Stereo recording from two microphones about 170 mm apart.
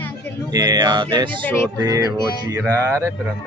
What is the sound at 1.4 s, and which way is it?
Speech, 10° left (ahead or behind).